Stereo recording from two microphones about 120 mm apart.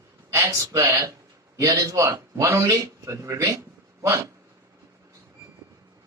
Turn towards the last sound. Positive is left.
turn(degrees=-25)  # may be behind; listen again after turning